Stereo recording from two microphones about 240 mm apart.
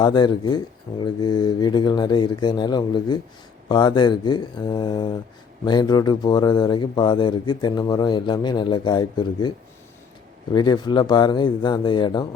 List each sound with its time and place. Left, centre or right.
0.0 s speech: centre
10.5 s speech: centre